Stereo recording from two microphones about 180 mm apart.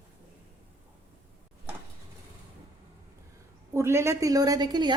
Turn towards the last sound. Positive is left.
turn(degrees=-25)  # may be behind; listen again after turning